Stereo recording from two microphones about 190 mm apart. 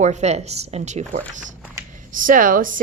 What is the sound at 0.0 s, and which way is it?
A woman's voice, 35° right (ahead or behind).